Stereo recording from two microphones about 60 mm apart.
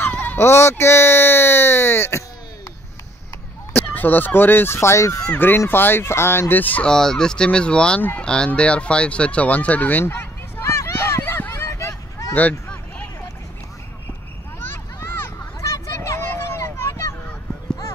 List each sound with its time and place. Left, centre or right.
0.0 s sheep: left
0.4 s speech: left
3.7 s speech: left
4.7 s speech: left
5.7 s speech: left
6.5 s speech: left
6.8 s speech: centre
8.5 s fowl: centre; by 11.9 s left
12.4 s honk: left
15.0 s a sound: left
15.6 s a sound: left
16.3 s vehicle: left